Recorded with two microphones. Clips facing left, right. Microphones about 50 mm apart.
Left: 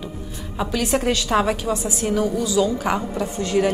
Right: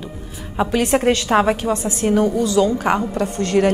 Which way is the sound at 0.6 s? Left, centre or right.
Right.